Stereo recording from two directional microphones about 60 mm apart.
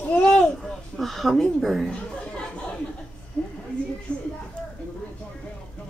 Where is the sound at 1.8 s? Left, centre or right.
Centre.